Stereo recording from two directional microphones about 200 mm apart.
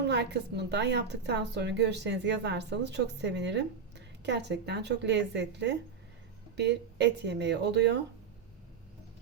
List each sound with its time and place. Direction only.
0.1 s a woman's voice: 55° right (ahead or behind)